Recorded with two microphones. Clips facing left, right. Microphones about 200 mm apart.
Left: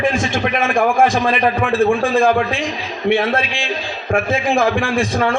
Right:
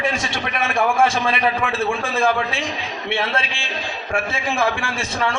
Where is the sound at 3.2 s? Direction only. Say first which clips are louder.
Left 5 dB; 50° left (ahead or behind).